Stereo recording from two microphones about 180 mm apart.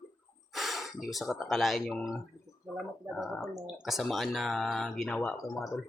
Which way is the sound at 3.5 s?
Centre (ahead or behind).